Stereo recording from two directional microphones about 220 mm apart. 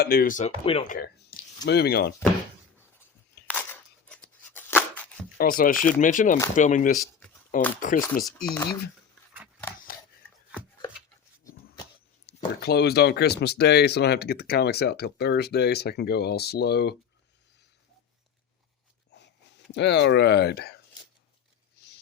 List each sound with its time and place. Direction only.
0.0 s speech: 45° left (ahead or behind); by 0.9 s 25° left (ahead or behind)
0.9 s speech: 40° left (ahead or behind)
3.5 s scissors: 10° left (ahead or behind)
5.4 s speech: 40° left (ahead or behind)
8.4 s speech: 20° left (ahead or behind)
9.9 s scissors: 40° left (ahead or behind)
12.3 s a sound: 45° left (ahead or behind)
12.6 s speech: 45° left (ahead or behind)
19.1 s a sound: 50° left (ahead or behind)
19.7 s speech: 50° left (ahead or behind)